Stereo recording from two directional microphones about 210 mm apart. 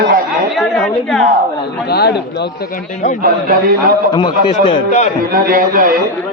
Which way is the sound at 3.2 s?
45° right (ahead or behind).